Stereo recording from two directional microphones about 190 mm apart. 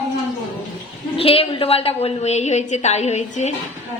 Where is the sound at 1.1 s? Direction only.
30° left (ahead or behind).